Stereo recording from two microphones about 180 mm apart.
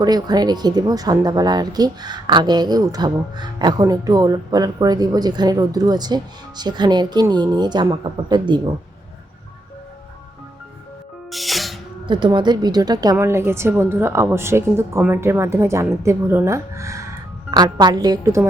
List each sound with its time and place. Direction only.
0.0 s speech: 20° right (ahead or behind)
11.3 s music: centre (ahead or behind)
12.0 s a woman's voice: 25° right (ahead or behind)